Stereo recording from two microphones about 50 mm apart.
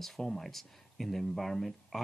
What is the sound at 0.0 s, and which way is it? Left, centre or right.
Speech, centre.